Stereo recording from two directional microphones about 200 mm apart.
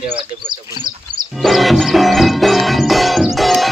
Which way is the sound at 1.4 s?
Centre (ahead or behind).